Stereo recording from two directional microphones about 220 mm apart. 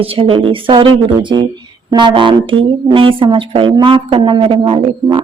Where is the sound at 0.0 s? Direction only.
25° right (ahead or behind).